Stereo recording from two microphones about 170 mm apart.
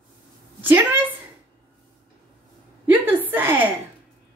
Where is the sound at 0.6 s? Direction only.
10° right (ahead or behind).